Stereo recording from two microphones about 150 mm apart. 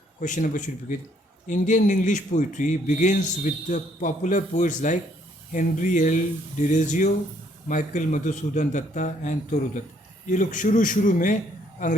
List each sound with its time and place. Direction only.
0.2 s speech: 60° left (ahead or behind)